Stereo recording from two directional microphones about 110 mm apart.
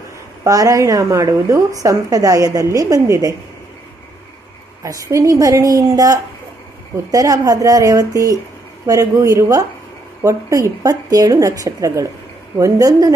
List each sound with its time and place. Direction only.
0.4 s a woman's voice: 30° right (ahead or behind)
4.8 s a woman's voice: 30° right (ahead or behind)